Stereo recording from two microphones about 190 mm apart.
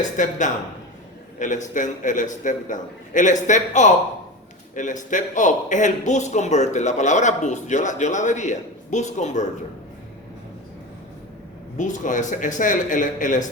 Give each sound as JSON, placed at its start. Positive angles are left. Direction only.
{"t": 0.2, "sound": "a man's voice", "side_deg": 40}
{"t": 11.8, "sound": "a man's voice", "side_deg": 40}